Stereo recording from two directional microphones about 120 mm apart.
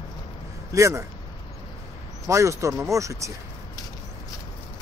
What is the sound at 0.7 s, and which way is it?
Speech, 25° right (ahead or behind).